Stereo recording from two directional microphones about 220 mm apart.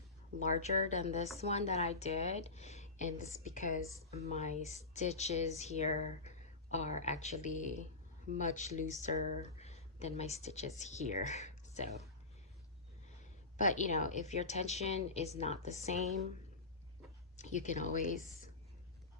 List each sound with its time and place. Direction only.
0.4 s speech: 30° left (ahead or behind)
13.6 s speech: 35° left (ahead or behind)
17.3 s speech: 35° left (ahead or behind)